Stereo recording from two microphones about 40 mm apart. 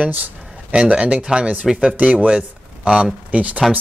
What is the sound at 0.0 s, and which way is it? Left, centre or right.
Speech, right.